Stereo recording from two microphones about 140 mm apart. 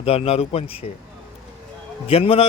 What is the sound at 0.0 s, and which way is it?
Speech, 45° left (ahead or behind).